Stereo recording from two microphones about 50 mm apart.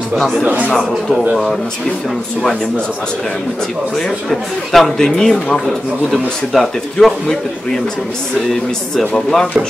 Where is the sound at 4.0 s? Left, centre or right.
Centre.